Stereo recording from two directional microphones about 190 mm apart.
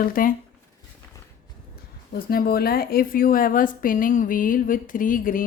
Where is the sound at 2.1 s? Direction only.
50° left (ahead or behind).